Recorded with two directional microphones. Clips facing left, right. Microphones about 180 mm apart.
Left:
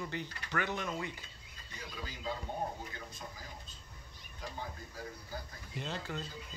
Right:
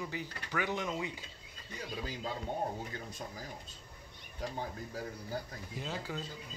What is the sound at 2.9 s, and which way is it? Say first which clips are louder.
Speech: right 4 dB; 35° right (ahead or behind).